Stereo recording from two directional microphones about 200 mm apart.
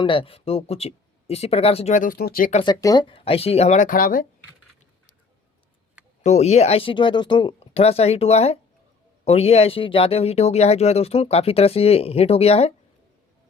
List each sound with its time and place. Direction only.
0.0 s speech: 25° left (ahead or behind); by 2.6 s 45° left (ahead or behind)
2.6 s speech: 20° left (ahead or behind); by 4.3 s 45° left (ahead or behind)
6.2 s speech: 35° left (ahead or behind)